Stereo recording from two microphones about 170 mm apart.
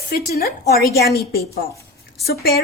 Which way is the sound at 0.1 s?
65° left (ahead or behind).